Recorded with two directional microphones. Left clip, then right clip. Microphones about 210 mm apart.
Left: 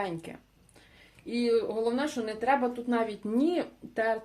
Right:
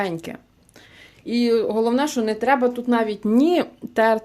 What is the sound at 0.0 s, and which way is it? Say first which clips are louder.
Speech: right 9 dB; 30° right (ahead or behind).